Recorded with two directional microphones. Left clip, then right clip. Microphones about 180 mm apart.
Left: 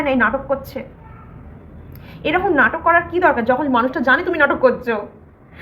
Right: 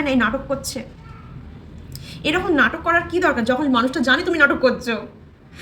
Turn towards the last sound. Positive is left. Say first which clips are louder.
# left 3 dB
turn(degrees=-25)  # may be behind; listen again after turning